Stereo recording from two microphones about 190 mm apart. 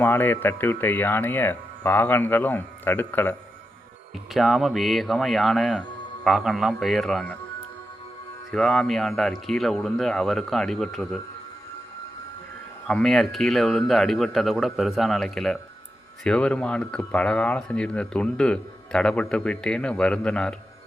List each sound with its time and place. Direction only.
0.0 s speech: 10° left (ahead or behind)
4.4 s speech: centre (ahead or behind)
8.4 s speech: centre (ahead or behind)
12.9 s speech: centre (ahead or behind)